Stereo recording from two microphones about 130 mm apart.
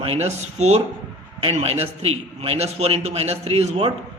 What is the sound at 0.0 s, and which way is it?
A man's voice, 55° right (ahead or behind).